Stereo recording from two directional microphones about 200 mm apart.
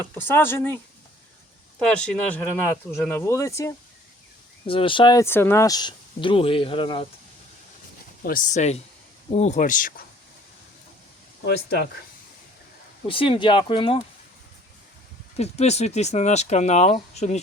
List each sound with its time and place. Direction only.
0.1 s speech: 10° left (ahead or behind)
1.8 s speech: 5° left (ahead or behind)
4.6 s speech: 25° left (ahead or behind)
8.2 s speech: 40° left (ahead or behind)
11.4 s speech: 55° left (ahead or behind)
13.1 s speech: 25° left (ahead or behind)
15.4 s speech: 35° left (ahead or behind)